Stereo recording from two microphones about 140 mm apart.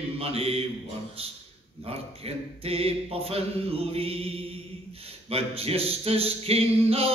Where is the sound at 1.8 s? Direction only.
45° right (ahead or behind).